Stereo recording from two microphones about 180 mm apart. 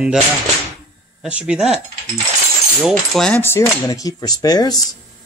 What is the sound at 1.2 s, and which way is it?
Speech, 5° right (ahead or behind).